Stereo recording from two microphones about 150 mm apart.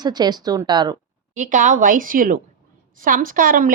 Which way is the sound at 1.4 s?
60° right (ahead or behind).